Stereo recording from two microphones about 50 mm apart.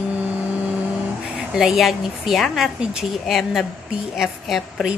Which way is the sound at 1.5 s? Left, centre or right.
Centre.